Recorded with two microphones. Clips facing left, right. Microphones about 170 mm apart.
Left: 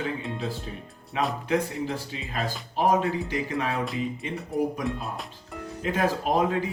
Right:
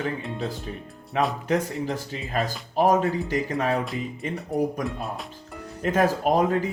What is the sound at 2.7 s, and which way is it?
Speech, 45° right (ahead or behind).